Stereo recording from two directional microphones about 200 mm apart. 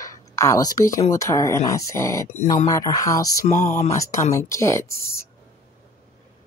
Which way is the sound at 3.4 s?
35° left (ahead or behind).